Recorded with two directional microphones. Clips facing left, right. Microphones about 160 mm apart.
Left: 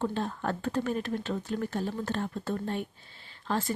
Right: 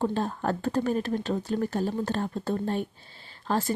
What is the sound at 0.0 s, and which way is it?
Speech, 40° right (ahead or behind).